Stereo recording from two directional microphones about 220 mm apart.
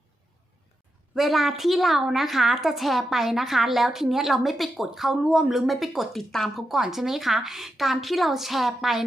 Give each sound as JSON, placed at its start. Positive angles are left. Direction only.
{"t": 1.1, "sound": "a woman's voice", "side_deg": 0}